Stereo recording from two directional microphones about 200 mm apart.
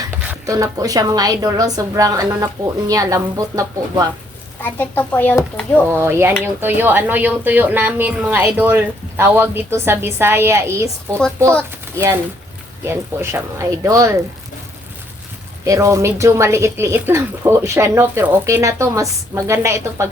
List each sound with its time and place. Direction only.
0.2 s speech: 10° right (ahead or behind)
4.6 s speech: 10° left (ahead or behind)
5.9 s speech: 10° right (ahead or behind)
12.8 s speech: 10° right (ahead or behind)
15.6 s speech: 15° right (ahead or behind)